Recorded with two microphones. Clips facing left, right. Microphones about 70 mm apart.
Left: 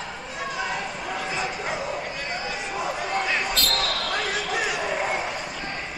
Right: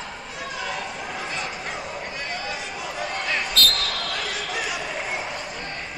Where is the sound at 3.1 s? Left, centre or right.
Centre.